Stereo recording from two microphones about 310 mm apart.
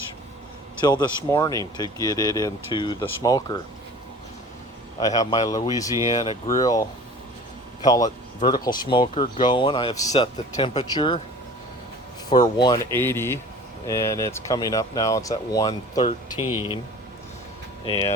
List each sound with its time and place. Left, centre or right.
0.8 s speech: centre
4.9 s speech: centre
12.3 s speech: centre
17.8 s speech: centre